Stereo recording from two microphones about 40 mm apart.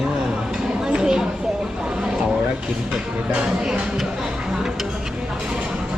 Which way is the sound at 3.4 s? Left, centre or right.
Right.